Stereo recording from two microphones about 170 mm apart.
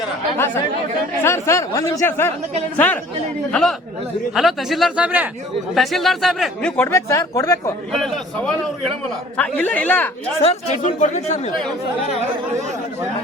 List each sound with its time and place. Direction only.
1.2 s speech: 15° left (ahead or behind)
8.0 s speech: centre (ahead or behind)
10.4 s speech: 40° left (ahead or behind)